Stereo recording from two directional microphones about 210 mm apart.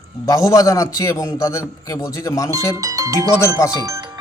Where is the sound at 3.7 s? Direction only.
15° right (ahead or behind).